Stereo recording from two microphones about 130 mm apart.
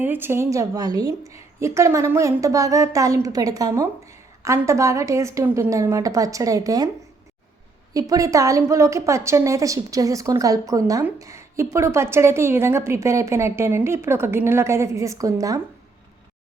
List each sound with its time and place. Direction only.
0.0 s a woman's voice: 15° right (ahead or behind)
7.9 s a woman's voice: 25° right (ahead or behind)